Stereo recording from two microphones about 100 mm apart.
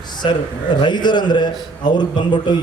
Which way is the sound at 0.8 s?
50° left (ahead or behind).